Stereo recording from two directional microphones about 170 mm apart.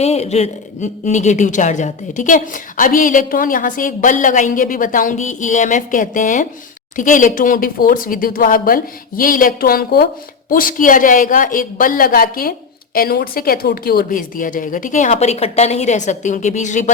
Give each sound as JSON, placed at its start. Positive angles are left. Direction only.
{"t": 0.0, "sound": "a woman's voice", "side_deg": 40}